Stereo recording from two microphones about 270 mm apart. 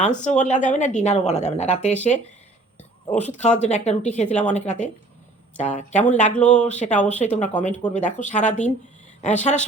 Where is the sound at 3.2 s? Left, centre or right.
Left.